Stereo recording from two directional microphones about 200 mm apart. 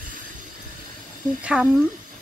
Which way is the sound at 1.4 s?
5° right (ahead or behind).